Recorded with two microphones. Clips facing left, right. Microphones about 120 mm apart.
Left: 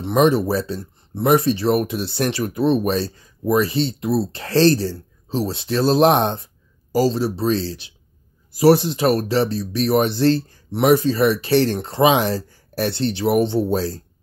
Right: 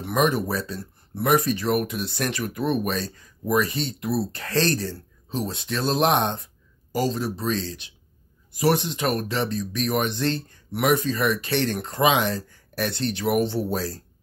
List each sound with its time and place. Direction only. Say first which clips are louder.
0.0 s speech: left 6 dB; 30° left (ahead or behind)